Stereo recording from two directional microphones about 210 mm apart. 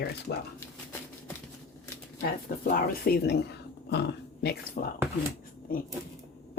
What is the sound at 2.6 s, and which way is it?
Speech, 45° left (ahead or behind).